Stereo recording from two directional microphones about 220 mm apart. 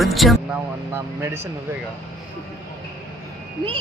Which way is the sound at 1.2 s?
10° right (ahead or behind).